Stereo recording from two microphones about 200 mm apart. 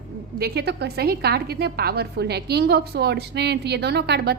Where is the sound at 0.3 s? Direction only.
55° right (ahead or behind).